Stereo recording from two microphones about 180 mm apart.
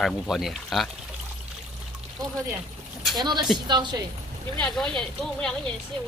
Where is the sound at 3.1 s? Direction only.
25° right (ahead or behind).